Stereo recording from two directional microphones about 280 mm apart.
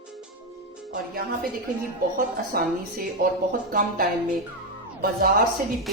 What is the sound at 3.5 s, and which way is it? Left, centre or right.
Speech, right.